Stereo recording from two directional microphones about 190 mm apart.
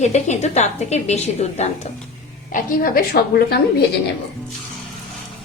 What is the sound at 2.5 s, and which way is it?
A woman's voice, 50° left (ahead or behind).